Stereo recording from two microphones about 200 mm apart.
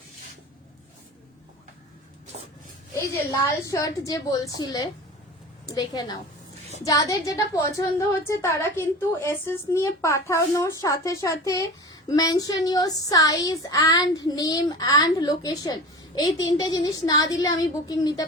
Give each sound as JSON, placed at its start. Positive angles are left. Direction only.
{"t": 3.7, "sound": "a woman's voice", "side_deg": 15}